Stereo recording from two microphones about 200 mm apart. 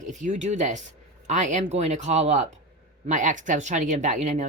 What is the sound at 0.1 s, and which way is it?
Speech, 35° right (ahead or behind).